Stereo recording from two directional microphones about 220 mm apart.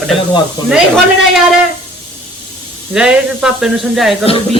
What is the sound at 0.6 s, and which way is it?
Speech, 20° left (ahead or behind).